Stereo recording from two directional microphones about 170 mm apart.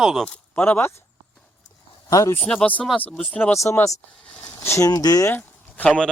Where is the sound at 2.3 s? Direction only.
5° left (ahead or behind).